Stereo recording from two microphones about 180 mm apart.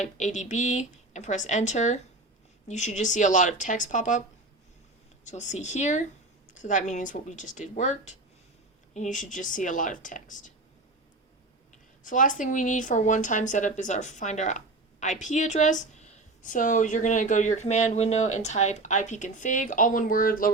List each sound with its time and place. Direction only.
0.0 s speech: 40° left (ahead or behind)
5.2 s speech: 40° left (ahead or behind)
12.0 s speech: 45° left (ahead or behind)